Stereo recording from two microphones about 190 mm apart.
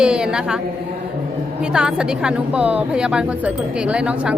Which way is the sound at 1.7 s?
5° right (ahead or behind).